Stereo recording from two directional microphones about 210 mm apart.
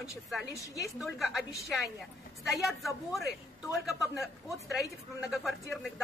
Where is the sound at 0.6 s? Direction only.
15° left (ahead or behind).